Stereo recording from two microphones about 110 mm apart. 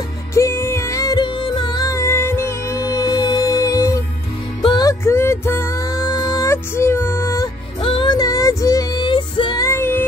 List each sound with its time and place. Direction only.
0.3 s music: 25° left (ahead or behind)
1.2 s music: 45° left (ahead or behind)
5.0 s music: 25° left (ahead or behind)
7.8 s music: 50° left (ahead or behind)
8.2 s music: 30° left (ahead or behind); by 9.6 s 45° left (ahead or behind)
9.6 s music: 25° left (ahead or behind)